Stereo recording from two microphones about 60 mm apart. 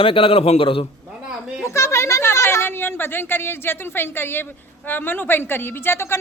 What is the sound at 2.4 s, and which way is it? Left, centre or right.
A woman's voice, left.